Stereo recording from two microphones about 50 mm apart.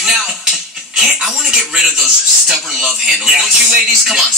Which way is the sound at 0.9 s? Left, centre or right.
Centre.